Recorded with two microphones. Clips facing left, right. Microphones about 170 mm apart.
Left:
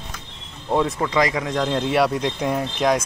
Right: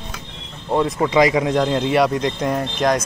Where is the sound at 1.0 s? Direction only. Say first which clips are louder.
Right 5 dB; 15° right (ahead or behind).